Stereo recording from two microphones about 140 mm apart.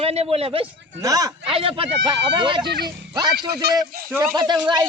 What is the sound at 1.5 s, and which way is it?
Speech, 40° right (ahead or behind).